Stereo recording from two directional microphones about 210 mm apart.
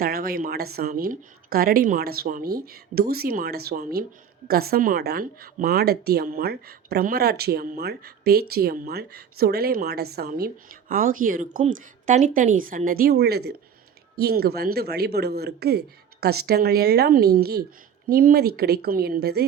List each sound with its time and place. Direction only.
0.0 s speech: 45° right (ahead or behind)